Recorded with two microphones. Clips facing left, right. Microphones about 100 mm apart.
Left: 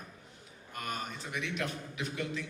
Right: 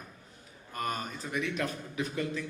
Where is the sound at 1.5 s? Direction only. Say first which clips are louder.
Right 3 dB; 40° right (ahead or behind).